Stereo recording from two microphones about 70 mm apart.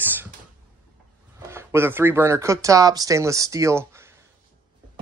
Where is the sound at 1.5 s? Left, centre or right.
Right.